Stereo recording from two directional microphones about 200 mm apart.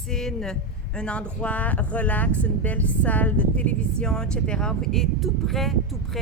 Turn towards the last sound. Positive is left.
turn(degrees=0)  # may be behind; listen again after turning